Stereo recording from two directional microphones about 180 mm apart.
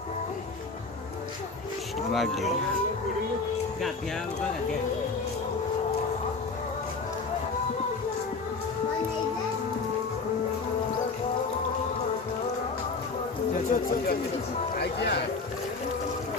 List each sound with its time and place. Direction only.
2.1 s speech: centre (ahead or behind)
13.7 s a sound: 50° left (ahead or behind)
14.8 s speech: 65° left (ahead or behind)